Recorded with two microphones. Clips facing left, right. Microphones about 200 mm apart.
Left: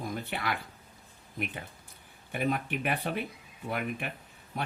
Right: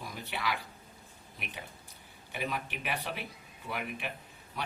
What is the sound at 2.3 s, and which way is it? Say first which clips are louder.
Speech: left 6 dB; 50° left (ahead or behind).